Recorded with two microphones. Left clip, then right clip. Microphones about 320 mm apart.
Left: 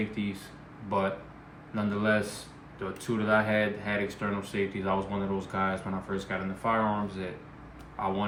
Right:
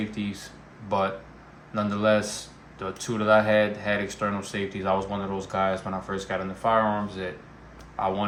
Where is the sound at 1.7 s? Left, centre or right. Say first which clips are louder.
Right 5 dB; right.